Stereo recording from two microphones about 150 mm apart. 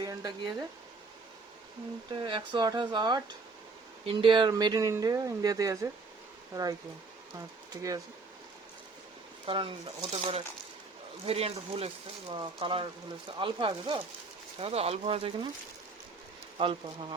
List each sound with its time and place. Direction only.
0.0 s a sound: 25° right (ahead or behind)
2.1 s speech: 35° right (ahead or behind)
9.5 s speech: 35° right (ahead or behind)
16.6 s speech: 35° right (ahead or behind)